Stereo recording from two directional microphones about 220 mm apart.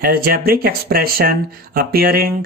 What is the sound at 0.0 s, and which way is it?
Speech, 45° right (ahead or behind).